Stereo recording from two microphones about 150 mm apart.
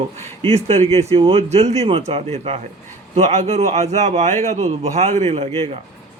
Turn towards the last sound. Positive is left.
turn(degrees=-50)  # may be behind; listen again after turning